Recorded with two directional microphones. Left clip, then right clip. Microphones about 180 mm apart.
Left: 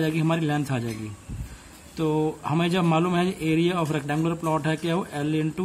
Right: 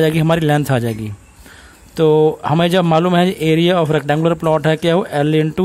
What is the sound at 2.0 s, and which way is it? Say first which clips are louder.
Speech: right 13 dB; 50° right (ahead or behind).